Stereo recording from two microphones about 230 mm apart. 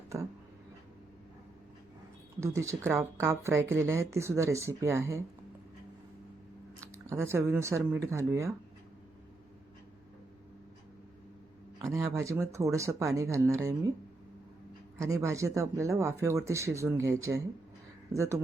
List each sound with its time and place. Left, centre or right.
2.4 s speech: centre
6.9 s speech: centre
11.8 s speech: centre
14.9 s speech: centre